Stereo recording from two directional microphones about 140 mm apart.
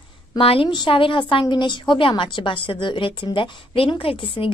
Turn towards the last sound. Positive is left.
turn(degrees=35)  # may be behind; listen again after turning